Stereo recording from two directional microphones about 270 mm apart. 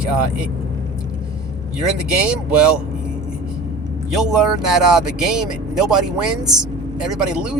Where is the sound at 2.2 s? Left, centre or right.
Centre.